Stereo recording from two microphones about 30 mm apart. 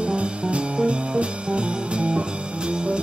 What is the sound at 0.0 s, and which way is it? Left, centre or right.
Music, right.